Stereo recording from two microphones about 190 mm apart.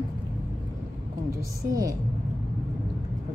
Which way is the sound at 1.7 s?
15° right (ahead or behind).